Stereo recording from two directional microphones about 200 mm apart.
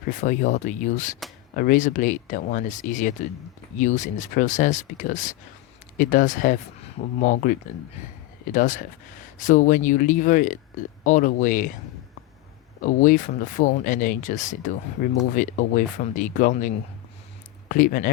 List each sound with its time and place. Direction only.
0.1 s speech: 40° left (ahead or behind)
8.5 s speech: 40° left (ahead or behind)
12.8 s speech: 40° left (ahead or behind)